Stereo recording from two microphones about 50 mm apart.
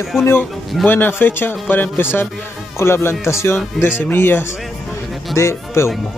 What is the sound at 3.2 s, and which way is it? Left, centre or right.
Speech, left.